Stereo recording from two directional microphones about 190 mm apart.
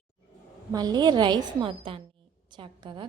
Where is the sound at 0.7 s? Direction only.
20° right (ahead or behind).